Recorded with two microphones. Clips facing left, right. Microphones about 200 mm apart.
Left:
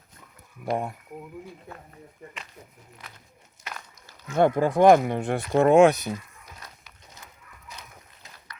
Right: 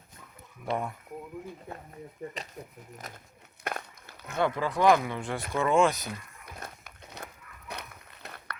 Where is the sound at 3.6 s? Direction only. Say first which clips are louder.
Right 6 dB; 55° right (ahead or behind).